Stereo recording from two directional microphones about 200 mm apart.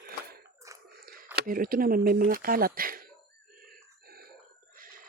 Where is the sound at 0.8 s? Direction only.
50° right (ahead or behind).